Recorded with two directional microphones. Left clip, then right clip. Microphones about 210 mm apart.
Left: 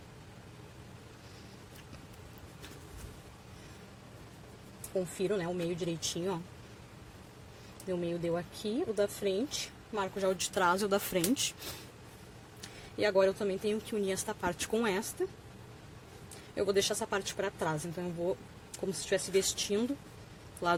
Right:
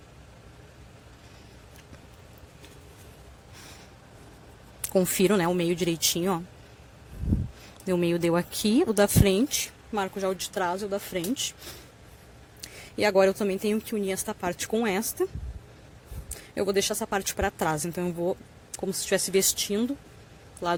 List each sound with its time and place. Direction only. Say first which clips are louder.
5.2 s speech: right 8 dB; 45° right (ahead or behind)
7.9 s speech: right 9 dB; 40° right (ahead or behind); by 10.8 s 15° right (ahead or behind)
10.8 s speech: even; centre (ahead or behind)
12.6 s speech: right 6 dB; 30° right (ahead or behind)
16.6 s speech: right 4 dB; 25° right (ahead or behind)